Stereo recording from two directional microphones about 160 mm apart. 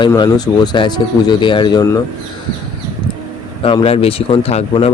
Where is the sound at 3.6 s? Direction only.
35° left (ahead or behind).